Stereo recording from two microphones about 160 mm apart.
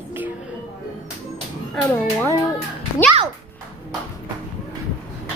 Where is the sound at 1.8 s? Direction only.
15° left (ahead or behind).